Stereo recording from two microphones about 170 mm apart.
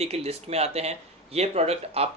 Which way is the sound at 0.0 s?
35° right (ahead or behind).